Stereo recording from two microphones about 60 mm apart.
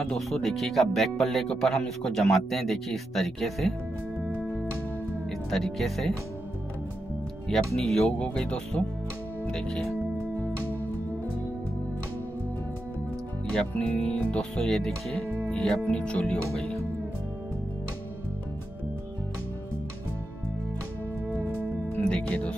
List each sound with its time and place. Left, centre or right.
0.3 s speech: centre
4.4 s music: centre
5.5 s speech: centre
7.4 s speech: centre
8.2 s speech: centre
13.5 s speech: left
16.5 s speech: centre
22.0 s speech: centre